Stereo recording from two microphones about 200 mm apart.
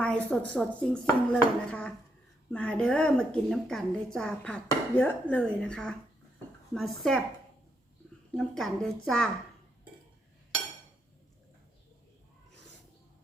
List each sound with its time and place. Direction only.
0.0 s a woman's voice: 5° left (ahead or behind)
8.4 s a woman's voice: centre (ahead or behind)